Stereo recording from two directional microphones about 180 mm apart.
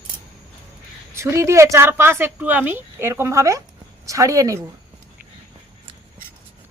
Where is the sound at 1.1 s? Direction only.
15° right (ahead or behind).